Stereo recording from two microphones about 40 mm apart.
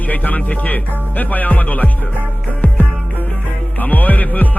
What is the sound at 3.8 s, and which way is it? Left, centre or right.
Music, left.